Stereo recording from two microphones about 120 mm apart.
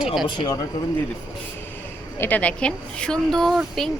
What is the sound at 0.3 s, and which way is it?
Speech, 35° left (ahead or behind).